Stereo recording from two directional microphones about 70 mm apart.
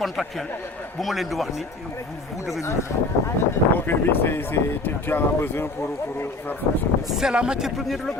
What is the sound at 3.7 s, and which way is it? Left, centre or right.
Speech, left.